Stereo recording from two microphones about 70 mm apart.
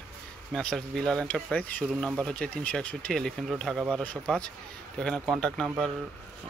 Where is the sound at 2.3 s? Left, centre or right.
Centre.